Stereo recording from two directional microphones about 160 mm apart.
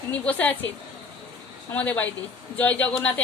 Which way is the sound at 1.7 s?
10° left (ahead or behind).